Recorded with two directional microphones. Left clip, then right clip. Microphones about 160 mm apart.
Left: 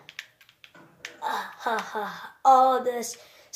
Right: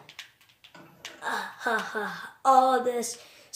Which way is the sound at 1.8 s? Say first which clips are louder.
Even; 40° right (ahead or behind).